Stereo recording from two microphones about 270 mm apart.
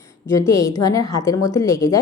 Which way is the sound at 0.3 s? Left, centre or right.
Centre.